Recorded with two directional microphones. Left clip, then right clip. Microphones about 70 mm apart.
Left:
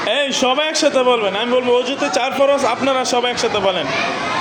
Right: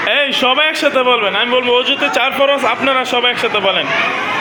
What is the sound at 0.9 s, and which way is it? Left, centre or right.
Speech, left.